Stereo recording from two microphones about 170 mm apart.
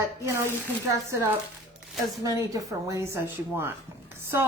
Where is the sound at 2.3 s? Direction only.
20° right (ahead or behind).